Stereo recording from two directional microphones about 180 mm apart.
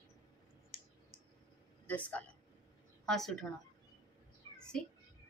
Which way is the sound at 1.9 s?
10° left (ahead or behind).